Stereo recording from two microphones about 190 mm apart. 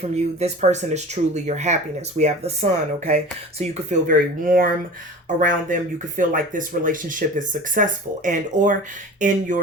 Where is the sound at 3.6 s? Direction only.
45° right (ahead or behind).